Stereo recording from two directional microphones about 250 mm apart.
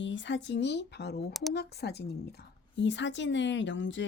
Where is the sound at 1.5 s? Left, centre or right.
Left.